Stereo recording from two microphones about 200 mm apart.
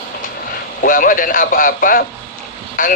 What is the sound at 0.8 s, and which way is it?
A man's voice, 45° left (ahead or behind).